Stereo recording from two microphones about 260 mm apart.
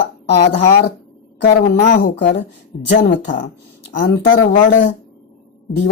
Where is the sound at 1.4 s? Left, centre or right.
Left.